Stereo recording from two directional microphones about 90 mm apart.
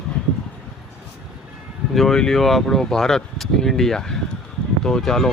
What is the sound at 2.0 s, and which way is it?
Speech, 5° left (ahead or behind).